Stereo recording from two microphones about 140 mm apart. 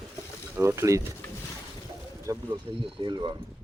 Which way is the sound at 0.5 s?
20° right (ahead or behind).